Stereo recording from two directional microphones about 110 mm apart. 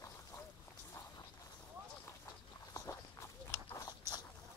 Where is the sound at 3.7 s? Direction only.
35° left (ahead or behind).